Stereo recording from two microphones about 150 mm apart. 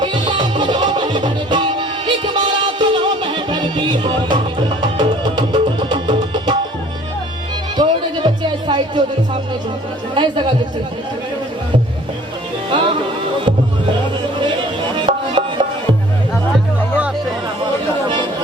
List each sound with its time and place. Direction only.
0.0 s music: 30° right (ahead or behind)
7.8 s music: 30° right (ahead or behind)
10.2 s speech: 35° right (ahead or behind)
14.9 s music: 30° right (ahead or behind)